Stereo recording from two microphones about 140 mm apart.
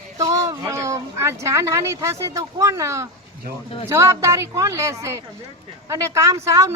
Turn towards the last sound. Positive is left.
turn(degrees=-20)  # may be behind; listen again after turning